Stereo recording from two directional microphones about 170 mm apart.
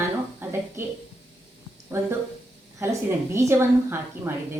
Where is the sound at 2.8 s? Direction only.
15° right (ahead or behind).